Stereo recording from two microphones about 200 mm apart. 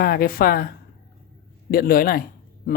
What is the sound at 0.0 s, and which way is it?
Speech, 50° left (ahead or behind).